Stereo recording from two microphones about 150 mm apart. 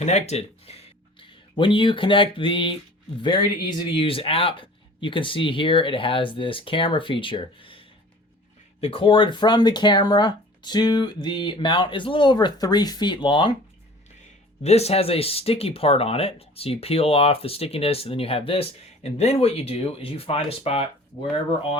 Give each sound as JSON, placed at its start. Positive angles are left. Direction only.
{"t": 0.0, "sound": "speech", "side_deg": 45}
{"t": 14.6, "sound": "speech", "side_deg": 45}